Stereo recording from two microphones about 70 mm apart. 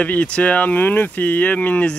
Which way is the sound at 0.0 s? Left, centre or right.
Left.